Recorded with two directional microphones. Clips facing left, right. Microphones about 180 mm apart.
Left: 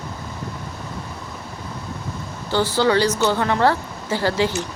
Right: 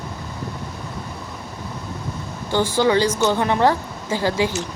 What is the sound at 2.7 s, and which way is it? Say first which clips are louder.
Speech: even; 15° right (ahead or behind).